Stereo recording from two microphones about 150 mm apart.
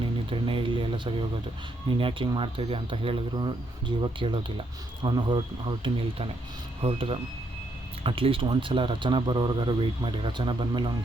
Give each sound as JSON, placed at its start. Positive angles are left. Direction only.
{"t": 0.0, "sound": "a man's voice", "side_deg": -35}